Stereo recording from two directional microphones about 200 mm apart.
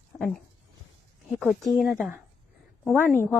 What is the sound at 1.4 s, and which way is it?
Speech, centre (ahead or behind).